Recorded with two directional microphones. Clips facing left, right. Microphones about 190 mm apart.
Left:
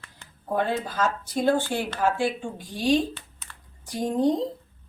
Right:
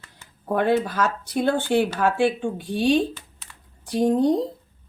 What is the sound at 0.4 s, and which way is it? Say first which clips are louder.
A woman's voice: right 5 dB; 70° right (ahead or behind).